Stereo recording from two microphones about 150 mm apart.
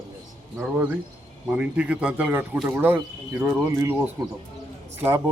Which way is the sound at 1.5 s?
10° right (ahead or behind).